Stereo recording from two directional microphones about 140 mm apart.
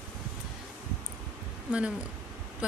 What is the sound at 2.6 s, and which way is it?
Speech, 10° right (ahead or behind).